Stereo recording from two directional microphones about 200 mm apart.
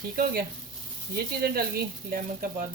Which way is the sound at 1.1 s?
50° right (ahead or behind).